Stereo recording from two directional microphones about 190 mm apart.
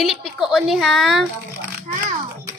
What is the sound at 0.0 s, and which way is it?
Speech, centre (ahead or behind).